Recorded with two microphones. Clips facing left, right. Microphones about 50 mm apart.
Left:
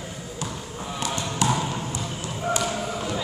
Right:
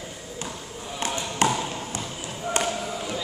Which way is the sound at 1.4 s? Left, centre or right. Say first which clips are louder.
Right 1 dB; right.